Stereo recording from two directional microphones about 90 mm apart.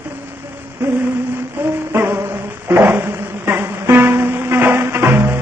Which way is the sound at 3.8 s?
25° right (ahead or behind).